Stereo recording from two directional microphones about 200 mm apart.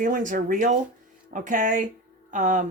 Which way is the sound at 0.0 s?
40° right (ahead or behind).